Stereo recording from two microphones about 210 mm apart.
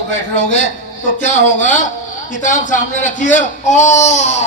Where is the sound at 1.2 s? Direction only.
35° left (ahead or behind).